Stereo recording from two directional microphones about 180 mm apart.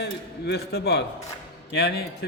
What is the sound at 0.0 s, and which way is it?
A man's voice, 70° left (ahead or behind).